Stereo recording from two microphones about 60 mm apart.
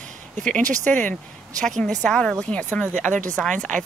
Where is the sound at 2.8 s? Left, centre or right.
Left.